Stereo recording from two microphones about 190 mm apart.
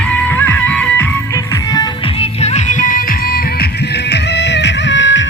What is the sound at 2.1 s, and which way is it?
Music, 35° left (ahead or behind).